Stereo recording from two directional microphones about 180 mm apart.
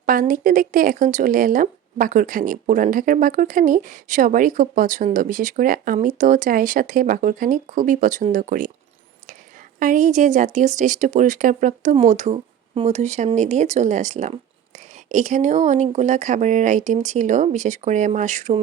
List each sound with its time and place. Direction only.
0.0 s speech: 50° right (ahead or behind)
9.8 s speech: 45° right (ahead or behind)